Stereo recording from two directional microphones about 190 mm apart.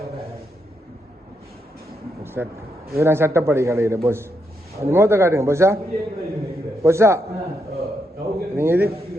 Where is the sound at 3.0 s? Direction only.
15° right (ahead or behind).